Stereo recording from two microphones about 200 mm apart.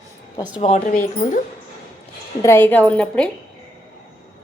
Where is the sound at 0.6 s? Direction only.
35° left (ahead or behind).